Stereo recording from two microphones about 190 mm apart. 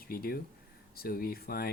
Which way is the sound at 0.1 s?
50° left (ahead or behind).